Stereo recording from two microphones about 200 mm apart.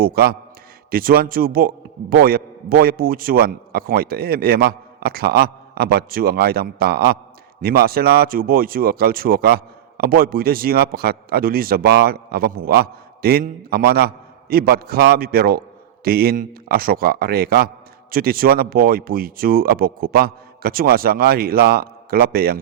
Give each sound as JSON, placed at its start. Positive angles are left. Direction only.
{"t": 0.0, "sound": "speech", "side_deg": -50}